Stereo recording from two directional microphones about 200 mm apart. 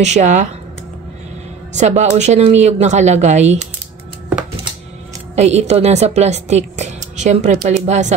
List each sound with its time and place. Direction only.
0.0 s a woman's voice: 35° right (ahead or behind)
1.7 s a woman's voice: 35° right (ahead or behind)
5.3 s a woman's voice: 35° right (ahead or behind)